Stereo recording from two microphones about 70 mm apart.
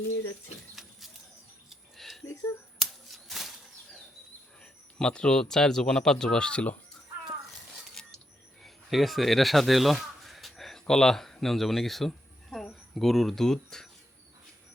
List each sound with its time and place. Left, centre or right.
0.8 s printer: centre
1.7 s a sound: centre
2.2 s speech: left
2.7 s scissors: centre
4.6 s speech: centre
8.0 s a sound: centre
8.6 s speech: centre